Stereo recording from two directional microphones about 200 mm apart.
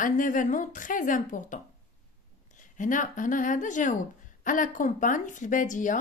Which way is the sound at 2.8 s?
40° left (ahead or behind).